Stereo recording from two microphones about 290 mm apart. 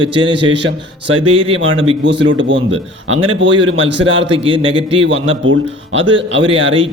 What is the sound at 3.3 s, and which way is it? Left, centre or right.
Speech, right.